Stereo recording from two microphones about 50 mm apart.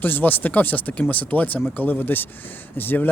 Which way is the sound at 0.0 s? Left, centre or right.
Left.